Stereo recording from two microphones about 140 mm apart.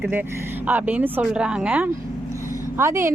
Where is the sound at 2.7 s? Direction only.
20° right (ahead or behind).